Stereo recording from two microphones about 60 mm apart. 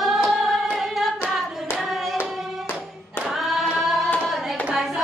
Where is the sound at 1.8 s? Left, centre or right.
Centre.